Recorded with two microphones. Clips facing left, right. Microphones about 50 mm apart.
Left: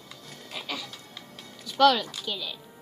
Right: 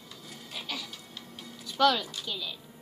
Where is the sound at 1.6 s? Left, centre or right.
Left.